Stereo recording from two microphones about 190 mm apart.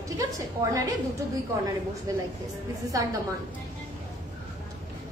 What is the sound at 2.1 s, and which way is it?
Speech, 15° right (ahead or behind).